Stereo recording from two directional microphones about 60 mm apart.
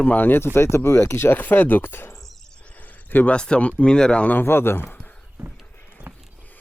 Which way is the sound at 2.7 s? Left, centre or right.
Left.